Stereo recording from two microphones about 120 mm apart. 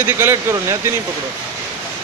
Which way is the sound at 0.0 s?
20° right (ahead or behind).